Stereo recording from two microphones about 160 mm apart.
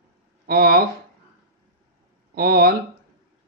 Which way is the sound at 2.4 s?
70° right (ahead or behind).